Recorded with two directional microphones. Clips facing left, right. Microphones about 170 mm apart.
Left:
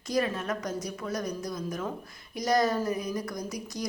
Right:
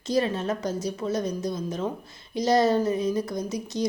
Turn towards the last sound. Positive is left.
turn(degrees=-25)  # may be behind; listen again after turning